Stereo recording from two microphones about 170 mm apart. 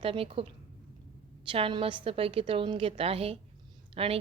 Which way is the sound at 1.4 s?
30° right (ahead or behind).